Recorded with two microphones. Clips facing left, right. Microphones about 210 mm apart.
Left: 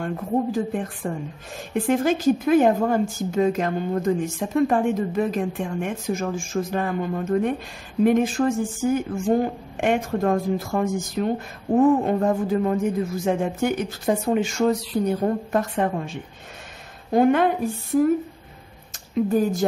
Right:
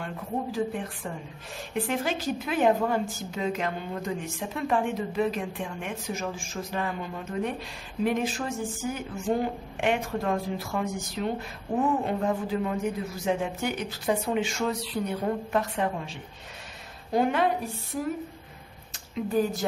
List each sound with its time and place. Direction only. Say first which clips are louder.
0.0 s speech: left 8 dB; 45° left (ahead or behind)